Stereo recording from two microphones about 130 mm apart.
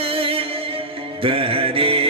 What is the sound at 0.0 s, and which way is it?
Music, 45° right (ahead or behind).